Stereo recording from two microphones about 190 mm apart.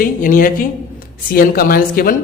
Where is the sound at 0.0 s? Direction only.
45° left (ahead or behind).